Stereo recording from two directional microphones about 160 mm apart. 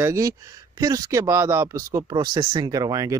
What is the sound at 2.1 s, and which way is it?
Speech, 25° right (ahead or behind).